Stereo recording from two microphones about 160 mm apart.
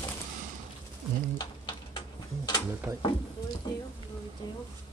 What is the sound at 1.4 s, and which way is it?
Stir, 25° left (ahead or behind).